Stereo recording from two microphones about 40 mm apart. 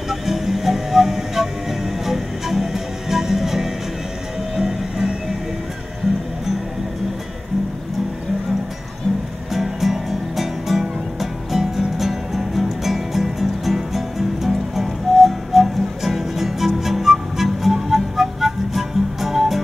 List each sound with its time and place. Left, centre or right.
0.1 s music: centre
9.5 s music: centre